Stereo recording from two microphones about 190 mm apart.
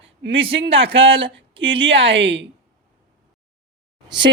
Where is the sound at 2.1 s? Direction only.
70° right (ahead or behind).